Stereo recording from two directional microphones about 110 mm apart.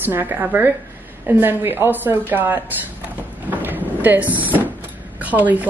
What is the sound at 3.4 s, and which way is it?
Cupboard open or close, 15° right (ahead or behind).